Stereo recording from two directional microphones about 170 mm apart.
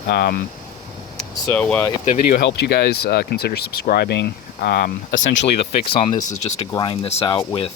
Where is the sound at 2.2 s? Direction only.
70° left (ahead or behind).